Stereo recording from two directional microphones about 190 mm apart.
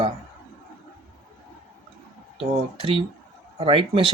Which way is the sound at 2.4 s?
30° right (ahead or behind).